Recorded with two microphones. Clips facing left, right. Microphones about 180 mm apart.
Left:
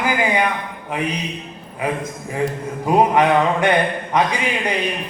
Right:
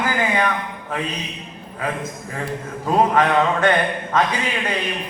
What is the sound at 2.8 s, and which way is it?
A man's voice, 15° left (ahead or behind).